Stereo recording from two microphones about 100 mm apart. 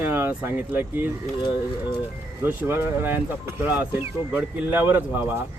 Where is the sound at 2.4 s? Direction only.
25° right (ahead or behind).